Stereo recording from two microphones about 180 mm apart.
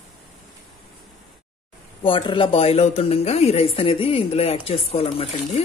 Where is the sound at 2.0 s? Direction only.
30° left (ahead or behind).